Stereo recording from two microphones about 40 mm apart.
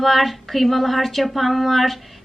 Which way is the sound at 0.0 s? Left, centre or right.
Centre.